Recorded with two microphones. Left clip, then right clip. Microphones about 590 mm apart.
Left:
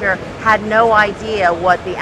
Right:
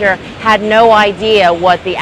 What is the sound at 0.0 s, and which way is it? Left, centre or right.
Speech, right.